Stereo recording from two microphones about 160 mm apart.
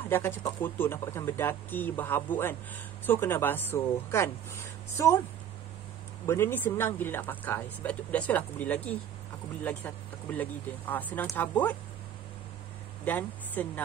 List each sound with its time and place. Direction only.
0.1 s speech: 15° left (ahead or behind)
6.2 s speech: 15° left (ahead or behind)
13.0 s speech: 10° left (ahead or behind)